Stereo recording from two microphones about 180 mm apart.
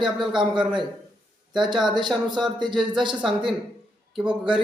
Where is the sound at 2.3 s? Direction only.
25° right (ahead or behind).